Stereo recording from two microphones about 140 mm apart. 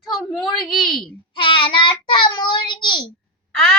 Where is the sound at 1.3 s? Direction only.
35° left (ahead or behind).